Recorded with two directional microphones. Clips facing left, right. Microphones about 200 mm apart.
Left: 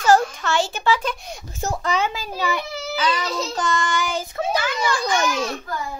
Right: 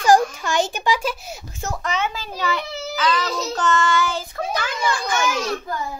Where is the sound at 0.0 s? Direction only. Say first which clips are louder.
Right 1 dB; 15° right (ahead or behind).